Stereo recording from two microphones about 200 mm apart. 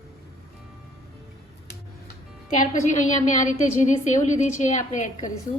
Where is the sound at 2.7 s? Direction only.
40° left (ahead or behind).